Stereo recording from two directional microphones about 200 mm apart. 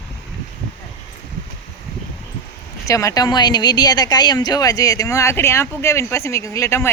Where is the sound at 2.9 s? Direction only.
15° left (ahead or behind).